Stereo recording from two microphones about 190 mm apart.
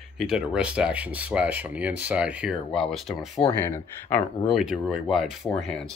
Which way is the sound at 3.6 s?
10° left (ahead or behind).